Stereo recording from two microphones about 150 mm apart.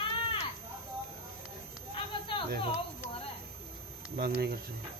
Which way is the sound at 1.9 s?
35° left (ahead or behind).